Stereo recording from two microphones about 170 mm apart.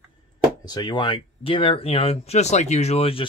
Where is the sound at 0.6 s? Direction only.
25° left (ahead or behind).